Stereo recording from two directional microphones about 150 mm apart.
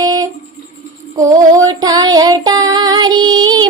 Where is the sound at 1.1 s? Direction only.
25° right (ahead or behind).